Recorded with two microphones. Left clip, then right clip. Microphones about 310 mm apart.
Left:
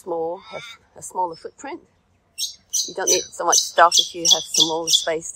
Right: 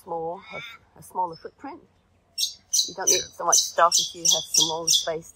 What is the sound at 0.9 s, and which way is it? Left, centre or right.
Speech, left.